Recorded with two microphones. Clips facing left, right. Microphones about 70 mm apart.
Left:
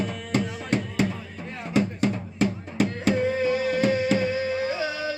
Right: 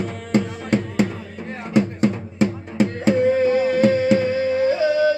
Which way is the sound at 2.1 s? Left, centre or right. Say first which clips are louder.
Right 4 dB; right.